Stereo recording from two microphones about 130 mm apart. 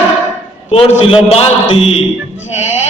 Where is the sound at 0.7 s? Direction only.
50° left (ahead or behind).